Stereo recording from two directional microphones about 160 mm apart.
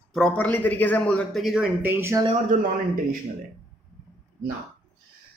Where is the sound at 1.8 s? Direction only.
15° right (ahead or behind).